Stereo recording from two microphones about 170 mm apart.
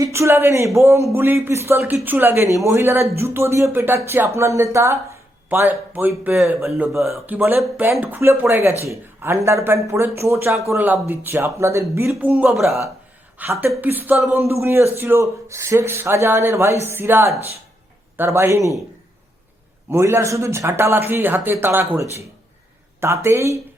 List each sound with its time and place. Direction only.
0.0 s speech: 15° right (ahead or behind)
12.3 s speech: centre (ahead or behind)
13.4 s speech: 15° right (ahead or behind)
19.9 s speech: 15° right (ahead or behind)